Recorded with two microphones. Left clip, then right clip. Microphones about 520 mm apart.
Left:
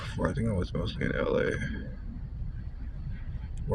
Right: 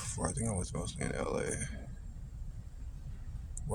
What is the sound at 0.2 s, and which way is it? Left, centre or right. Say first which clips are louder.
Speech: left 7 dB; right.